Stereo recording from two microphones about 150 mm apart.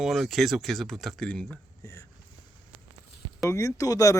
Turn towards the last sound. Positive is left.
turn(degrees=20)  # may be behind; listen again after turning